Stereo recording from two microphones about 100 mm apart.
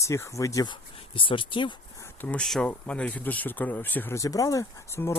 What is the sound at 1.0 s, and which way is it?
Speech, 60° left (ahead or behind).